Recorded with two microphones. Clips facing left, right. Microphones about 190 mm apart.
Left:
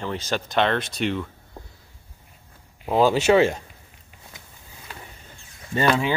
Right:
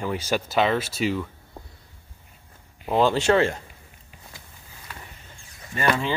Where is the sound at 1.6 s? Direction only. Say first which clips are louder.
Left 1 dB; centre (ahead or behind).